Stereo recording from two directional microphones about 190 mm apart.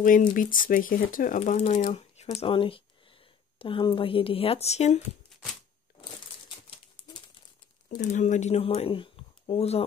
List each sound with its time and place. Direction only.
0.3 s speech: 45° left (ahead or behind)
8.0 s speech: 40° left (ahead or behind)